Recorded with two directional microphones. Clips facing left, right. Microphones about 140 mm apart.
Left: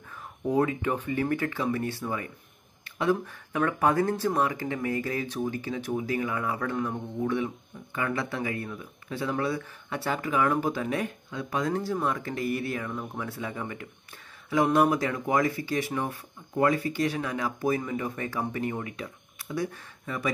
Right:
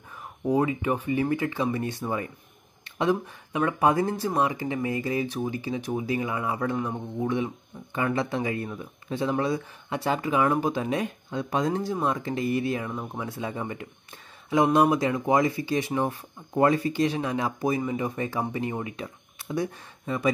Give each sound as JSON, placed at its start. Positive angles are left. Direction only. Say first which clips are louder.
{"t": 0.5, "sound": "speech", "louder": "right 1 dB", "side_deg": -10}